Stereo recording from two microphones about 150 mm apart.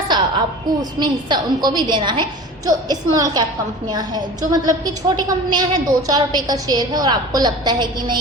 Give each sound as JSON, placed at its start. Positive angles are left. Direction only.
{"t": 0.1, "sound": "a woman's voice", "side_deg": -30}